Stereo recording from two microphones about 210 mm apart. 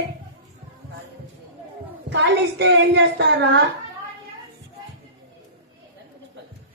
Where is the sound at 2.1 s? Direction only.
55° right (ahead or behind).